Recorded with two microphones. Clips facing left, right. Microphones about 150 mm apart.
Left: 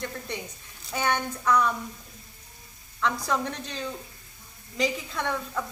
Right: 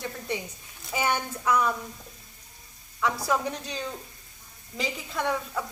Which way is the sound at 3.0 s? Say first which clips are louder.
Right 1 dB; 5° right (ahead or behind).